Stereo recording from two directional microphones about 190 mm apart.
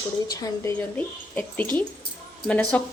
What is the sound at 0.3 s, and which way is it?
Speech, 10° left (ahead or behind).